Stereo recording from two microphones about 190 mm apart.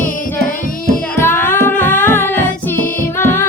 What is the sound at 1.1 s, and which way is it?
Music, 10° left (ahead or behind).